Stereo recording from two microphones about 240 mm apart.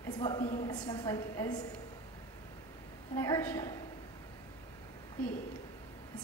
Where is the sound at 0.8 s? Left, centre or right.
Centre.